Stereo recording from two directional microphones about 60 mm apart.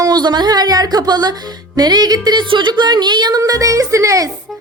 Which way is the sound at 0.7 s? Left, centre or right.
Right.